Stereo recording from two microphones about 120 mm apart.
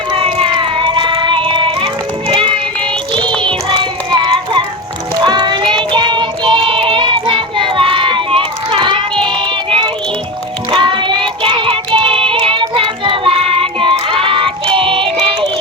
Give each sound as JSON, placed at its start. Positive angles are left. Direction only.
{"t": 0.1, "sound": "music", "side_deg": -50}
{"t": 3.4, "sound": "child singing", "side_deg": -40}
{"t": 10.7, "sound": "music", "side_deg": -45}
{"t": 11.9, "sound": "child singing", "side_deg": -45}